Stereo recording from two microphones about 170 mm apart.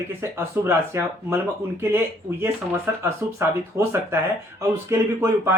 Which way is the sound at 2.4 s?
15° right (ahead or behind).